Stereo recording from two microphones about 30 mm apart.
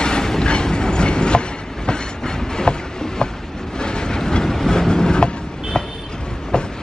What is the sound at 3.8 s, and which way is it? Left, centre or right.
Train, left.